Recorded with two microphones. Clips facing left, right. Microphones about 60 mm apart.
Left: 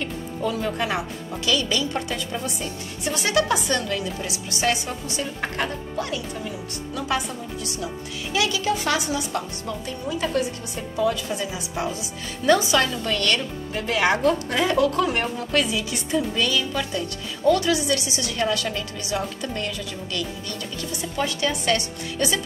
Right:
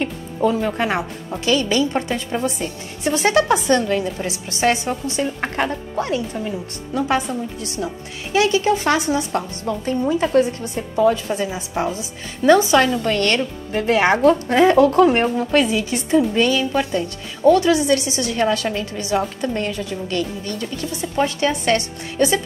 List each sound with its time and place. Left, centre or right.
0.0 s a woman's voice: right